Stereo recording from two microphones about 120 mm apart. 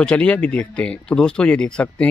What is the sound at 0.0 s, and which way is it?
Speech, 10° left (ahead or behind).